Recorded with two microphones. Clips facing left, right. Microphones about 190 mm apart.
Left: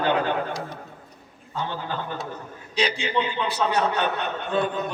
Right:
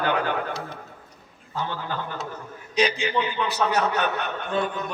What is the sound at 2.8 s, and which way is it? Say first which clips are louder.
A man's voice: right 1 dB; 30° left (ahead or behind).